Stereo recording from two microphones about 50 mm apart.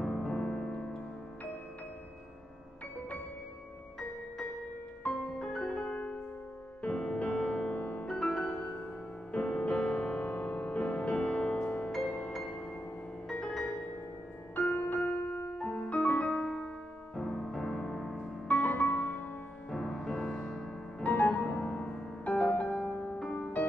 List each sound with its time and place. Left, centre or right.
0.0 s music: centre
5.4 s music: centre; by 8.0 s left
8.1 s music: centre; by 11.9 s left
12.3 s music: centre
14.5 s music: left
15.6 s music: centre
15.9 s music: left
16.4 s music: centre
18.5 s music: left
19.7 s music: centre
21.0 s music: left
23.1 s music: centre